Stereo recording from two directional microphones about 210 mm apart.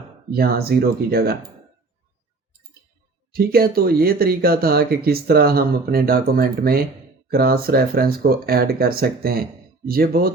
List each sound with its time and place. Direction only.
0.3 s speech: 50° right (ahead or behind)
3.3 s speech: 45° right (ahead or behind)